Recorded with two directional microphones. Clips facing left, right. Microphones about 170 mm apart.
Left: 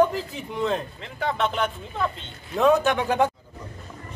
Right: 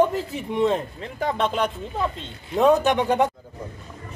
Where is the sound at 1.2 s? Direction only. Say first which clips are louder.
Right 2 dB; 35° right (ahead or behind).